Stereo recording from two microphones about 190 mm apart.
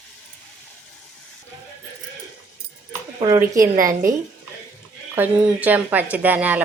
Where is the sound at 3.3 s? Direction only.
15° right (ahead or behind).